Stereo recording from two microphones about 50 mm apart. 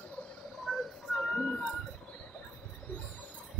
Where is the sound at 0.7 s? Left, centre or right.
Centre.